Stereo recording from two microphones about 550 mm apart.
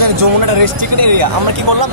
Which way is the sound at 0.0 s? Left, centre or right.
Right.